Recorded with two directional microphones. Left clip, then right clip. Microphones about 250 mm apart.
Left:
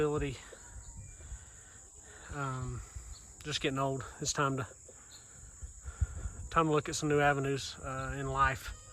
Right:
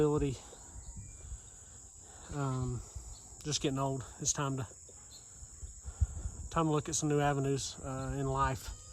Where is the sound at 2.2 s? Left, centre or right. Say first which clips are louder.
Even; centre.